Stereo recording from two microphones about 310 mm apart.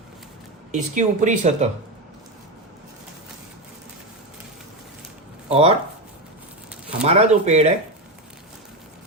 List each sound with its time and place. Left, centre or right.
0.7 s speech: right
5.5 s speech: centre
7.0 s speech: right